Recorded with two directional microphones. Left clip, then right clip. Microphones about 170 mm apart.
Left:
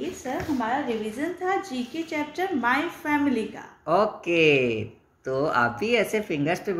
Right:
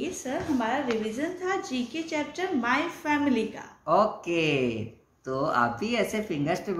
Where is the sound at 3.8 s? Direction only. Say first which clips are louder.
Left 1 dB; 15° left (ahead or behind).